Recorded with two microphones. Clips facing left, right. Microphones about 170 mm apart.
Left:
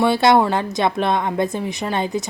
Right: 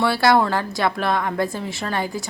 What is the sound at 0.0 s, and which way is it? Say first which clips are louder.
A woman's voice: left 3 dB; 20° left (ahead or behind).